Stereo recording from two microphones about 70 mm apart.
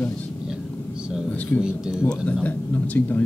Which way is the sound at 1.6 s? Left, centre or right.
Centre.